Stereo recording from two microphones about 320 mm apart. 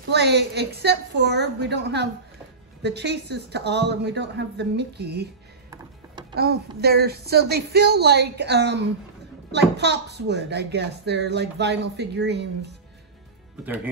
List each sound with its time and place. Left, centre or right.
0.1 s a child's voice: right
6.3 s a child's voice: right